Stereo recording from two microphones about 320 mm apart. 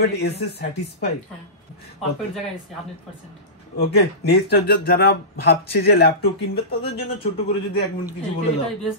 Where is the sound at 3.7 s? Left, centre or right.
Left.